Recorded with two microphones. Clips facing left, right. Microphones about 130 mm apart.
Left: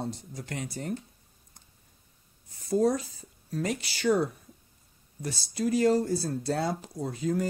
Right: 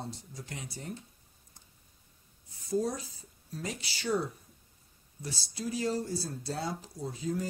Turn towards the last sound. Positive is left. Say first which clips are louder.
# left 5 dB
turn(degrees=65)  # may be behind; listen again after turning